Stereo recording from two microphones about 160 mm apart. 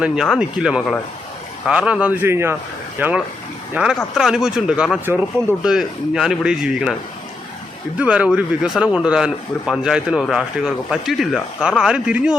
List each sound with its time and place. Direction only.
0.0 s speech: 5° right (ahead or behind)
7.9 s speech: 10° right (ahead or behind)